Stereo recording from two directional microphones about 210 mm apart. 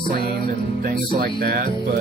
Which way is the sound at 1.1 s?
45° right (ahead or behind).